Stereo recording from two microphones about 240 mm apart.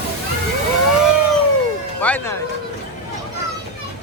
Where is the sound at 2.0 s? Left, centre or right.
Centre.